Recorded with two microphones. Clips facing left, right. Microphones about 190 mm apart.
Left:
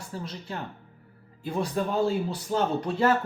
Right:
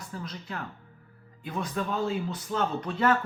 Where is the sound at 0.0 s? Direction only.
30° left (ahead or behind).